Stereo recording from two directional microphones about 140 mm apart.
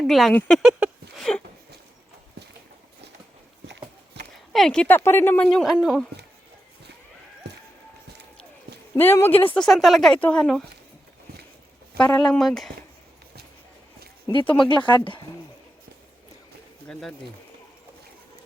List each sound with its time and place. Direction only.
0.0 s a woman's voice: centre (ahead or behind)
0.6 s a sound: 5° right (ahead or behind)
4.5 s speech: 5° left (ahead or behind)
4.9 s speech: 15° left (ahead or behind); by 6.1 s centre (ahead or behind)
9.0 s a woman's voice: 15° left (ahead or behind)
9.6 s speech: centre (ahead or behind)
12.1 s speech: 5° left (ahead or behind)
14.3 s speech: 35° left (ahead or behind)
16.9 s speech: 5° left (ahead or behind)